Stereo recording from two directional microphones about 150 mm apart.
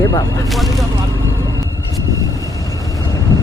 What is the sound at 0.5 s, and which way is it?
Speech, centre (ahead or behind).